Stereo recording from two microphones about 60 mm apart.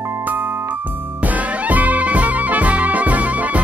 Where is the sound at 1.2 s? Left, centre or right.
Right.